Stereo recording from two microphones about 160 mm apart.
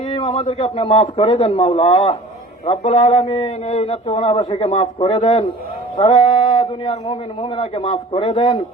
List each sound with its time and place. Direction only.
0.1 s a man's voice: 40° left (ahead or behind)